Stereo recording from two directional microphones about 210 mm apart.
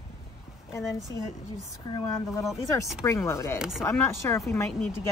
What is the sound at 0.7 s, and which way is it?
Speech, 15° left (ahead or behind).